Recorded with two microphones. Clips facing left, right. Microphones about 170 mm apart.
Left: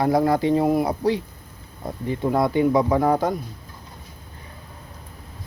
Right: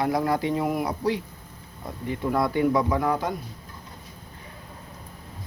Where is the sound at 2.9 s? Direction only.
40° left (ahead or behind).